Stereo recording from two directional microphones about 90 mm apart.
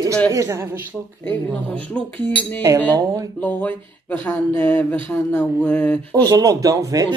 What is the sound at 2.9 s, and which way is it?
Speech, 40° right (ahead or behind).